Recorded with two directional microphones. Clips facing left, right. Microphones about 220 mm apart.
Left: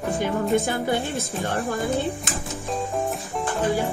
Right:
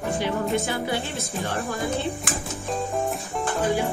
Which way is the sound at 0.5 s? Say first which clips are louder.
Left 3 dB; 50° left (ahead or behind).